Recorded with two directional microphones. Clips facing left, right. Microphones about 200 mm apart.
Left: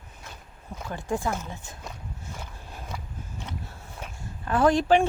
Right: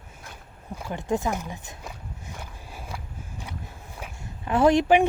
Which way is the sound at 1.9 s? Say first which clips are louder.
Left 2 dB; 10° right (ahead or behind).